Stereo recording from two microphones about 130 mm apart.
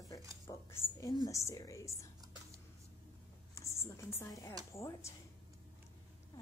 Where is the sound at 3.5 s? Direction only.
20° left (ahead or behind).